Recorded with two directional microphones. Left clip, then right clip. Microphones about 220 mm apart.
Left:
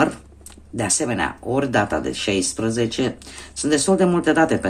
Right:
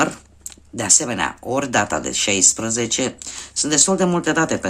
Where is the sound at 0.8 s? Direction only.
20° right (ahead or behind).